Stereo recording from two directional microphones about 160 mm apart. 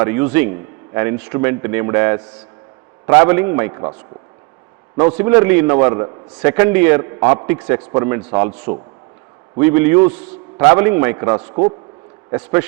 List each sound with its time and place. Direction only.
0.0 s a man's voice: 15° right (ahead or behind)
4.9 s a man's voice: 20° right (ahead or behind)
9.6 s a man's voice: 15° right (ahead or behind)
11.3 s a man's voice: 30° right (ahead or behind)
12.3 s a man's voice: 15° right (ahead or behind)